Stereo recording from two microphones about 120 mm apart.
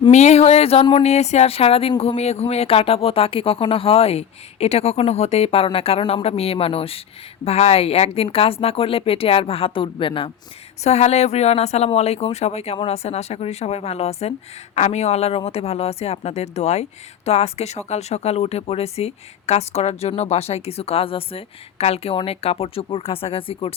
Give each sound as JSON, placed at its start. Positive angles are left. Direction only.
{"t": 0.1, "sound": "speech", "side_deg": 70}
{"t": 10.8, "sound": "speech", "side_deg": 65}